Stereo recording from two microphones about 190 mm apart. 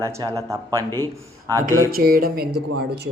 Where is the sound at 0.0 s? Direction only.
15° right (ahead or behind).